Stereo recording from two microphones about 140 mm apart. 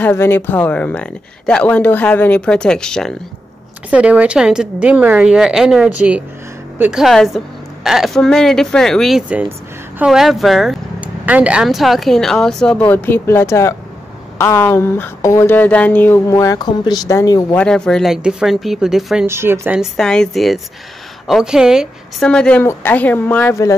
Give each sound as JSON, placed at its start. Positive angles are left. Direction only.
{"t": 0.0, "sound": "speech", "side_deg": 15}
{"t": 3.9, "sound": "a woman's voice", "side_deg": -10}
{"t": 17.6, "sound": "speech", "side_deg": 5}
{"t": 19.2, "sound": "a woman's voice", "side_deg": -20}
{"t": 19.8, "sound": "speech", "side_deg": 5}